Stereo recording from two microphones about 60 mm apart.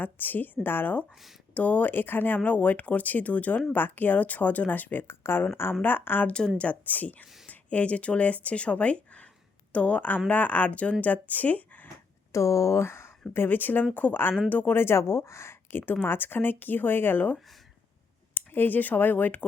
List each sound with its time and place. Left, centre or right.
0.0 s speech: left
12.3 s speech: left
13.3 s speech: left
16.0 s speech: left
18.3 s speech: left